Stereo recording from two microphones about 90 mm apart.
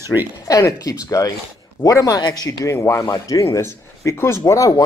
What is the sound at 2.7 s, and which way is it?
Speech, 30° left (ahead or behind).